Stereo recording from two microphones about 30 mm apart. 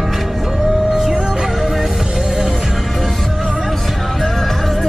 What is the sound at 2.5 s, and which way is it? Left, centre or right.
Music, centre.